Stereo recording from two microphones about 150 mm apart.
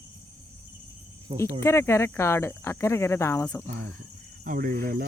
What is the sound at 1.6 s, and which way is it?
Speech, 15° left (ahead or behind).